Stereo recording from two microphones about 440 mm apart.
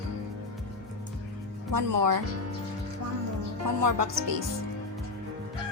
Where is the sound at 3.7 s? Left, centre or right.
Right.